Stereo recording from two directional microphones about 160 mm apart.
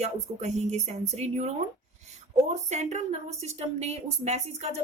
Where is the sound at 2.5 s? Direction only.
45° right (ahead or behind).